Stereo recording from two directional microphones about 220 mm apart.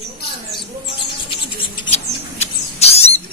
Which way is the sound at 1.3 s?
25° left (ahead or behind).